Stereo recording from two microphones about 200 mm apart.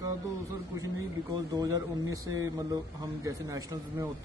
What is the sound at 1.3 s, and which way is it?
Speech, 15° right (ahead or behind).